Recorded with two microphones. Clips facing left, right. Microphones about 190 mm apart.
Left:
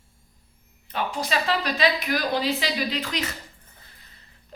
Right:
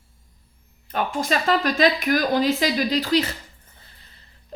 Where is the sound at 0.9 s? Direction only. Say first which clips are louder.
Right 3 dB; 50° right (ahead or behind).